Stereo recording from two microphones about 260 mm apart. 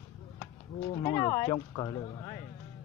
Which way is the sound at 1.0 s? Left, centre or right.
Centre.